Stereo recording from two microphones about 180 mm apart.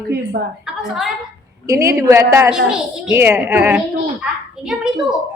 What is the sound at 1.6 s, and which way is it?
Speech, 20° right (ahead or behind).